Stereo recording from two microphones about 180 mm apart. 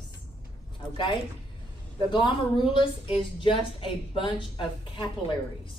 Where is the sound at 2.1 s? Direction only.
25° left (ahead or behind).